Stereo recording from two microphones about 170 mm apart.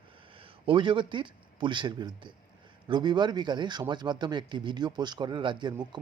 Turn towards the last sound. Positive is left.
turn(degrees=-25)  # may be behind; listen again after turning